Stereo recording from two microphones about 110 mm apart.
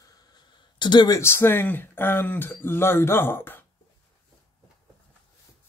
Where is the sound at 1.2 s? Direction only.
25° left (ahead or behind).